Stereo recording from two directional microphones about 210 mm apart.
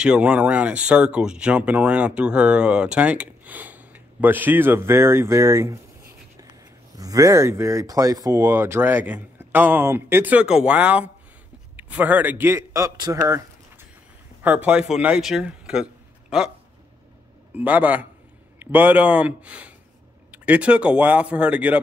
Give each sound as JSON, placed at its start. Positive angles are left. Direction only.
{"t": 0.0, "sound": "speech", "side_deg": -5}
{"t": 7.0, "sound": "a man's voice", "side_deg": -15}
{"t": 17.6, "sound": "speech", "side_deg": -5}